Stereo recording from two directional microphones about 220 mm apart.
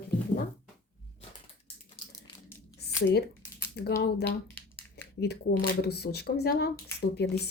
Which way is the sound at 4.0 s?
45° left (ahead or behind).